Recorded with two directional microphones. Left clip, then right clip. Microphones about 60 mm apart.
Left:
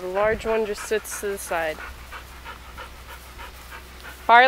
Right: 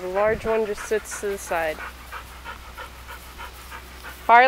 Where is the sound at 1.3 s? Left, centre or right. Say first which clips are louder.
Right 1 dB; centre.